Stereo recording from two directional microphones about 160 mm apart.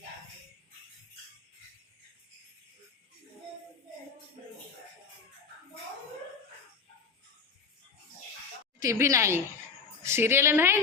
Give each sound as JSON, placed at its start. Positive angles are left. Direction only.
{"t": 8.8, "sound": "a woman's voice", "side_deg": -20}